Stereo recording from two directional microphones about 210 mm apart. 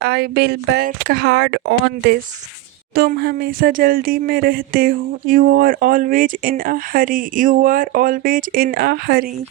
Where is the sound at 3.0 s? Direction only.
50° right (ahead or behind).